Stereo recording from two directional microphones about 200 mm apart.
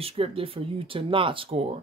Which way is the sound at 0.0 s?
30° right (ahead or behind).